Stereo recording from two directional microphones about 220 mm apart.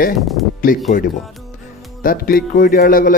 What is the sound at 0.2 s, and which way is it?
Speech, centre (ahead or behind).